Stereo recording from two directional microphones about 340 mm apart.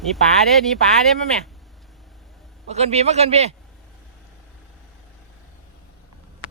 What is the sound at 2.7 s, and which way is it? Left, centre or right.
Speech, centre.